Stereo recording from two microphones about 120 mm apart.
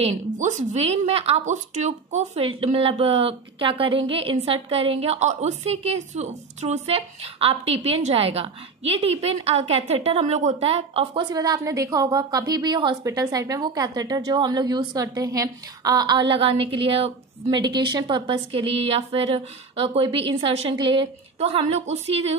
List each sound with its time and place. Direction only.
0.0 s speech: 90° right
2.3 s a woman's voice: 50° right (ahead or behind)
11.3 s a woman's voice: 30° right (ahead or behind); by 17.1 s 50° right (ahead or behind)
17.5 s a woman's voice: 35° right (ahead or behind); by 21.5 s 55° right (ahead or behind)
21.6 s a woman's voice: 65° right (ahead or behind)